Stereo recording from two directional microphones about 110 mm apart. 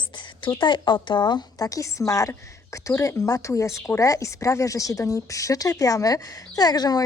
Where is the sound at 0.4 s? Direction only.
45° left (ahead or behind).